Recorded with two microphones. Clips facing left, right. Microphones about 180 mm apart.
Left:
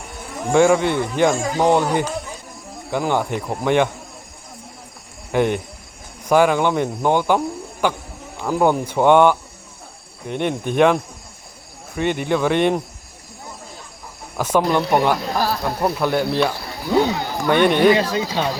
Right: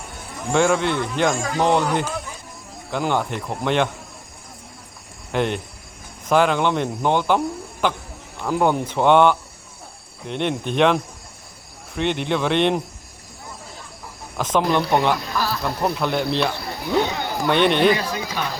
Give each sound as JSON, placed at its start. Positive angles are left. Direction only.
{"t": 0.5, "sound": "speech", "side_deg": 10}
{"t": 5.3, "sound": "a man's voice", "side_deg": 10}
{"t": 14.3, "sound": "speech", "side_deg": 10}
{"t": 15.3, "sound": "speech", "side_deg": 50}
{"t": 15.8, "sound": "speech", "side_deg": 5}
{"t": 17.5, "sound": "speech", "side_deg": 10}
{"t": 17.9, "sound": "speech", "side_deg": 25}